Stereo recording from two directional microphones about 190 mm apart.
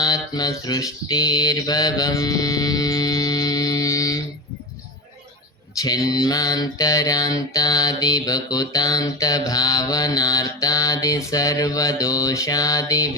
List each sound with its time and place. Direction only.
0.0 s mantra: 20° left (ahead or behind)
5.7 s mantra: 20° left (ahead or behind)